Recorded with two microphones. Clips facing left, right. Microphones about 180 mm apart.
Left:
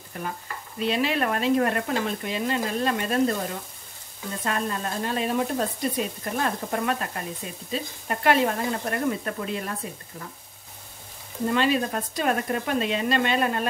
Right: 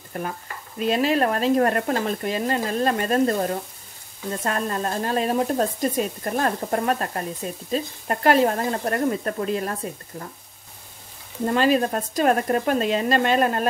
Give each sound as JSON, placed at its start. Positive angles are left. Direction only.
{"t": 0.1, "sound": "speech", "side_deg": -50}
{"t": 4.4, "sound": "speech", "side_deg": -45}
{"t": 11.5, "sound": "speech", "side_deg": -45}